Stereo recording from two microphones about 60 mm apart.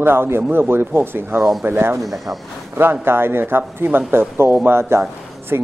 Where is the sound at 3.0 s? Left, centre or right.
Right.